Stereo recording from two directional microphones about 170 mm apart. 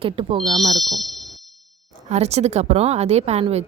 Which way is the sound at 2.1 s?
40° right (ahead or behind).